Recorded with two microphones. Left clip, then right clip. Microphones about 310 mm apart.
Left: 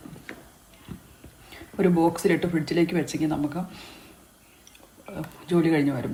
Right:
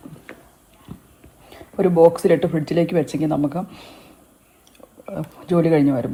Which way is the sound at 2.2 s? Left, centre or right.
Centre.